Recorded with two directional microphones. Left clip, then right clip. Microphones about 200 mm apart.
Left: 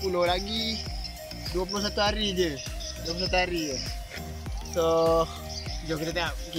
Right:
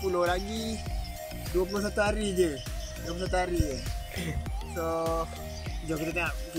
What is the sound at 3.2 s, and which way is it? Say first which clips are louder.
Speech: left 3 dB; 5° left (ahead or behind).